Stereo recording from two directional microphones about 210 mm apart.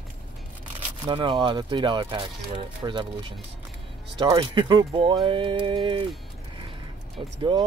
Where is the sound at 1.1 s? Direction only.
20° right (ahead or behind).